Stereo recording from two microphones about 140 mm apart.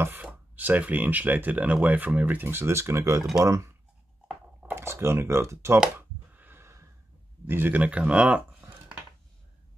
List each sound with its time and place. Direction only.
0.0 s speech: 10° right (ahead or behind)
5.9 s a sound: 15° right (ahead or behind)
7.4 s speech: 15° right (ahead or behind)